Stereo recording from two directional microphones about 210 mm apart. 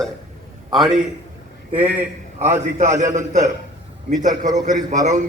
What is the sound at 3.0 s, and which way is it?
Speech, 35° right (ahead or behind).